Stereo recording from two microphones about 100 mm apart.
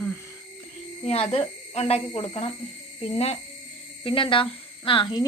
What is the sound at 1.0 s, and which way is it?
Speech, 90° left.